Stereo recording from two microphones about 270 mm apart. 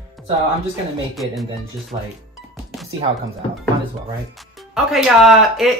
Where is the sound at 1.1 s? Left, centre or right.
Centre.